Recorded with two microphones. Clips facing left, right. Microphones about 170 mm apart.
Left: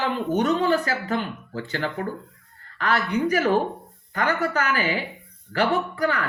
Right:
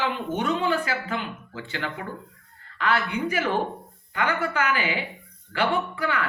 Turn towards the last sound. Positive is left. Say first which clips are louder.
# left 2 dB
turn(degrees=40)  # may be behind; listen again after turning